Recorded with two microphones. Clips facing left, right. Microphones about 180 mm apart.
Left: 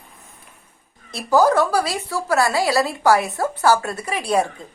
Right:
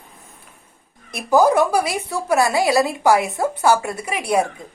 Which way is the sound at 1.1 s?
15° right (ahead or behind).